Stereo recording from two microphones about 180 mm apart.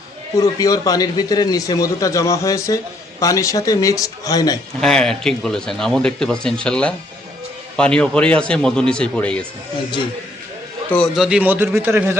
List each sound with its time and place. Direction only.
0.3 s a man's voice: 20° left (ahead or behind)
4.8 s speech: 5° left (ahead or behind)
10.9 s a man's voice: centre (ahead or behind)